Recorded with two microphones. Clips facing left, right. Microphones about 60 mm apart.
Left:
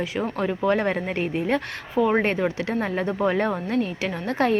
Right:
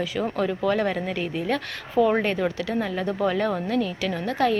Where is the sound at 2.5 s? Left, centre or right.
Left.